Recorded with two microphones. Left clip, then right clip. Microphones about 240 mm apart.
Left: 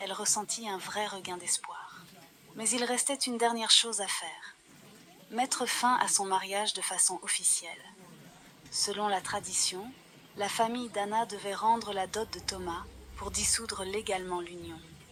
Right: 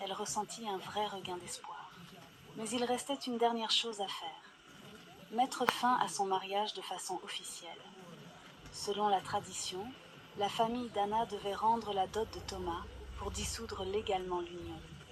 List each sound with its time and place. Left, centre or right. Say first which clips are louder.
0.0 s a sound: left 5 dB; left
0.5 s speech: left 4 dB; left
8.8 s speech: left 2 dB; left